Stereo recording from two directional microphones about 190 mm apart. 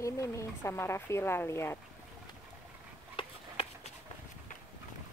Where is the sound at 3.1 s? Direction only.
30° left (ahead or behind).